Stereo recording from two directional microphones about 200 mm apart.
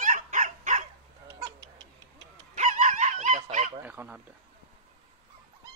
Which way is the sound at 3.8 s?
10° right (ahead or behind).